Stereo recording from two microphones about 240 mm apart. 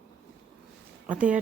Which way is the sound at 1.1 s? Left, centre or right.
Centre.